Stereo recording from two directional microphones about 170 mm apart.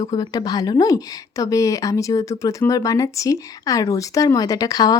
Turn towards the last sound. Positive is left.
turn(degrees=20)  # may be behind; listen again after turning